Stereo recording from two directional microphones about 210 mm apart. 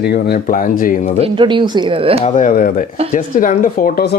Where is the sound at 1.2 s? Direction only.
25° right (ahead or behind).